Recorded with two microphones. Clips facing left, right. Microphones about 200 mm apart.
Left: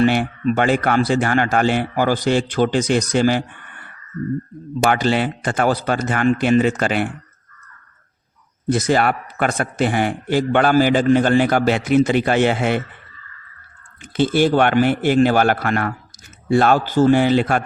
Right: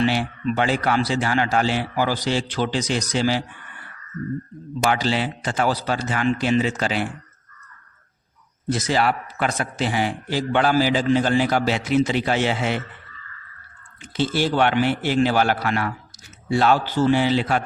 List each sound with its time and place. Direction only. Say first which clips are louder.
0.0 s speech: left 5 dB; 55° left (ahead or behind)
4.8 s a man's voice: left 4 dB; 55° left (ahead or behind)
8.7 s a man's voice: left 4 dB; 55° left (ahead or behind)
14.0 s speech: left 6 dB; 55° left (ahead or behind)